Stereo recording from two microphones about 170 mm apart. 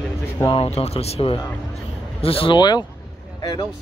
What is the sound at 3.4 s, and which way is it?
Vehicle, 25° left (ahead or behind).